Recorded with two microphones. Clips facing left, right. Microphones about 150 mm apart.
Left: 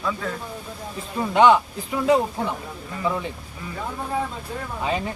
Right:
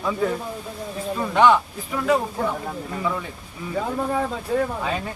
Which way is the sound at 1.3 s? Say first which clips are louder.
Left 1 dB; 20° left (ahead or behind).